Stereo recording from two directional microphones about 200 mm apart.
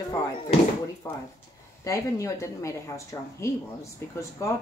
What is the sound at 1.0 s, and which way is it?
Speech, 15° left (ahead or behind).